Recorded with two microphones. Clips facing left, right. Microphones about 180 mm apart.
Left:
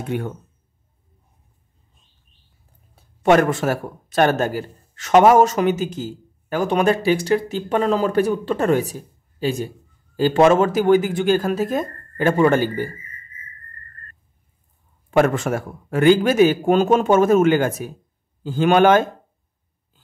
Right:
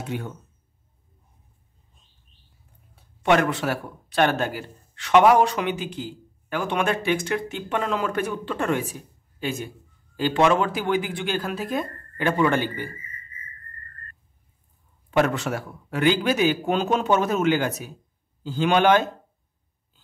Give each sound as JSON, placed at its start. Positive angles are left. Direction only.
{"t": 0.0, "sound": "speech", "side_deg": 55}
{"t": 3.0, "sound": "a man's voice", "side_deg": 45}
{"t": 15.0, "sound": "a man's voice", "side_deg": 50}